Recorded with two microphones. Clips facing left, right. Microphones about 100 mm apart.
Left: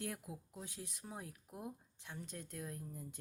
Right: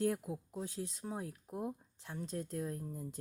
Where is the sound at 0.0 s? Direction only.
35° right (ahead or behind).